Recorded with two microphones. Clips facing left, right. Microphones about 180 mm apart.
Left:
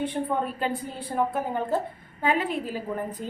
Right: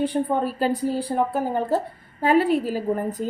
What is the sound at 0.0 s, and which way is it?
A woman's voice, 35° right (ahead or behind).